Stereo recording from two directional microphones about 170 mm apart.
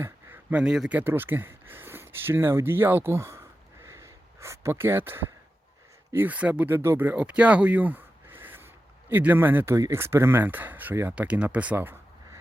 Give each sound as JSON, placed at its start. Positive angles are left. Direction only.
{"t": 0.0, "sound": "speech", "side_deg": -10}
{"t": 3.8, "sound": "a sound", "side_deg": -15}
{"t": 6.1, "sound": "speech", "side_deg": -10}